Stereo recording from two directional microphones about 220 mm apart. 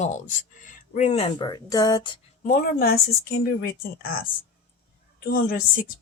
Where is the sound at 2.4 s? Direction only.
40° left (ahead or behind).